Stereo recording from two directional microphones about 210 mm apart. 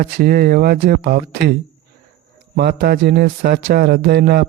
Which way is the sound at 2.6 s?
50° right (ahead or behind).